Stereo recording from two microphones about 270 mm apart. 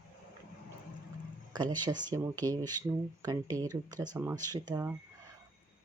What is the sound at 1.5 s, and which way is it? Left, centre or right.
Speech, centre.